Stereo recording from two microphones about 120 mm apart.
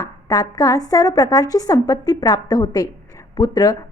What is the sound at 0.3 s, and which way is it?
A woman's voice, 30° left (ahead or behind).